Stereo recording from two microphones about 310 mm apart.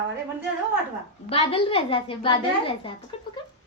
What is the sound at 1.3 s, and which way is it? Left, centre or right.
A woman's voice, centre.